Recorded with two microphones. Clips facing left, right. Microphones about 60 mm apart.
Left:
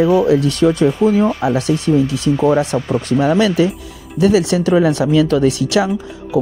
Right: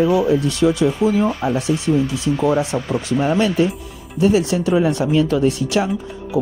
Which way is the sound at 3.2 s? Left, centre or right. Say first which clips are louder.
Left 3 dB; left.